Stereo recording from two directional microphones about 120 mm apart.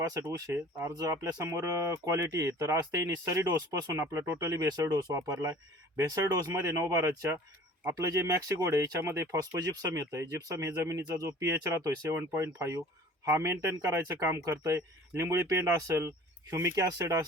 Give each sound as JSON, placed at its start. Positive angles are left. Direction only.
{"t": 0.1, "sound": "speech", "side_deg": -25}